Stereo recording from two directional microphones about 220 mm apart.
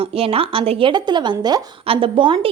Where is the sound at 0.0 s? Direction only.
25° right (ahead or behind).